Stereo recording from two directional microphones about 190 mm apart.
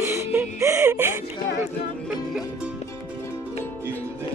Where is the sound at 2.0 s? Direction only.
5° right (ahead or behind).